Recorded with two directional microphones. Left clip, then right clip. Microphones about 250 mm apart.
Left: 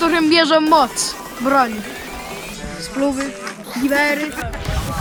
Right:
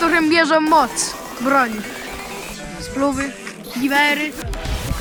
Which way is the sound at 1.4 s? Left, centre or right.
Centre.